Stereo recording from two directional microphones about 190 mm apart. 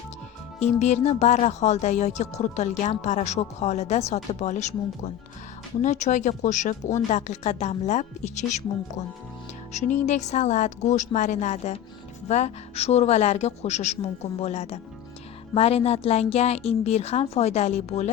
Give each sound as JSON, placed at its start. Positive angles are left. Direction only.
{"t": 0.6, "sound": "speech", "side_deg": 35}